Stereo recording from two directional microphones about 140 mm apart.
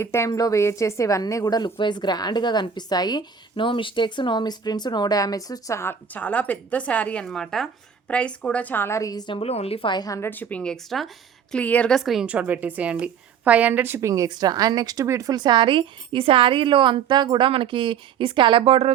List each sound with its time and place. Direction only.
0.0 s a woman's voice: 20° left (ahead or behind); by 18.9 s 45° right (ahead or behind)